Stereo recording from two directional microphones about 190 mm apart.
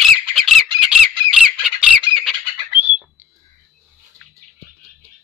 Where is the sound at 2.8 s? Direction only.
10° right (ahead or behind).